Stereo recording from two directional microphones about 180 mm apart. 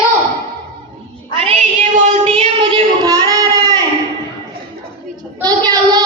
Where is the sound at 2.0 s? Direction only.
40° right (ahead or behind); by 3.8 s 20° right (ahead or behind).